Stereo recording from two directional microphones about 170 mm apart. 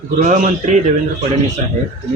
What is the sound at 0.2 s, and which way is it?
Speech, 45° right (ahead or behind).